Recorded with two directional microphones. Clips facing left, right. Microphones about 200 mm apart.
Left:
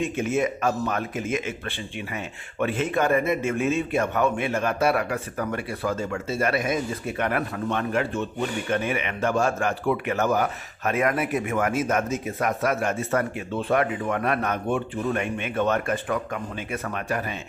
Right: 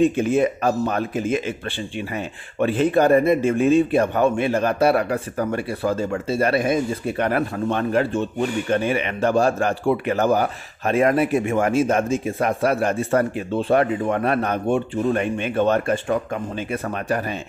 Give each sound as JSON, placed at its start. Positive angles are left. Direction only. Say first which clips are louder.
{"t": 0.0, "sound": "a man's voice", "louder": "right 7 dB", "side_deg": -35}
{"t": 2.6, "sound": "a man's voice", "louder": "right 6 dB", "side_deg": -35}